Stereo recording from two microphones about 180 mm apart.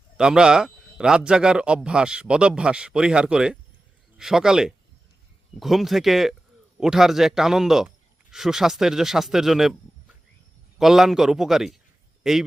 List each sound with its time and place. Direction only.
0.2 s a man's voice: 5° right (ahead or behind)
10.8 s a man's voice: centre (ahead or behind)